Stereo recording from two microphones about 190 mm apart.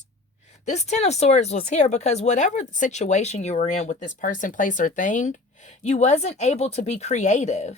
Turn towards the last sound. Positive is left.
turn(degrees=35)  # may be behind; listen again after turning